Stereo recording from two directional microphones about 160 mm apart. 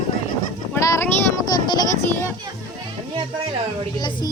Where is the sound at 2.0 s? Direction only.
15° left (ahead or behind).